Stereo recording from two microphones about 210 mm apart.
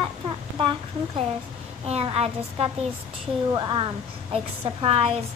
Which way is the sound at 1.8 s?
30° right (ahead or behind).